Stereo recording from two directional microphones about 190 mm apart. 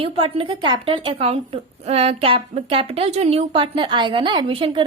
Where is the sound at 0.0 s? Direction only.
30° right (ahead or behind).